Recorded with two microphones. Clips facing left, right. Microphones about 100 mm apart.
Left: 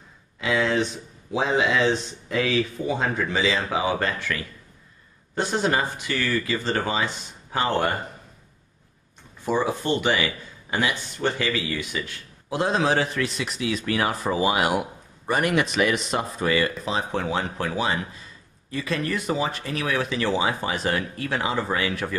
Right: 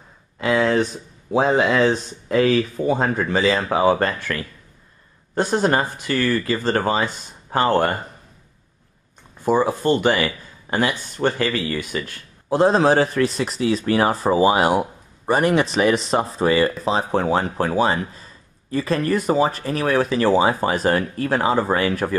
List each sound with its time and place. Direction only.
0.4 s speech: 45° right (ahead or behind)
9.4 s speech: 40° right (ahead or behind)